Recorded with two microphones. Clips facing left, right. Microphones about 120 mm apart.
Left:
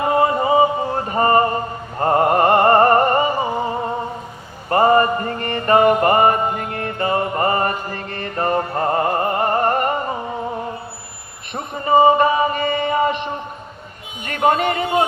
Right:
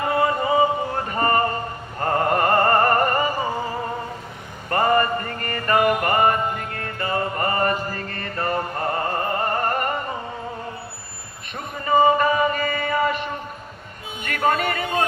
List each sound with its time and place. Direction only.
0.0 s music: 25° left (ahead or behind)
3.3 s a sound: 20° left (ahead or behind)
5.5 s music: 25° left (ahead or behind)
11.5 s a sound: 35° left (ahead or behind)
12.6 s chant: 25° left (ahead or behind)
14.3 s speech: 30° left (ahead or behind)